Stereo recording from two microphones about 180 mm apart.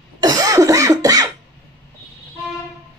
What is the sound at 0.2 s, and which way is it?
Cough, 20° right (ahead or behind).